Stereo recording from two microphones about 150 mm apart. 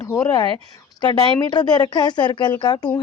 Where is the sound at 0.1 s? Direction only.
20° left (ahead or behind).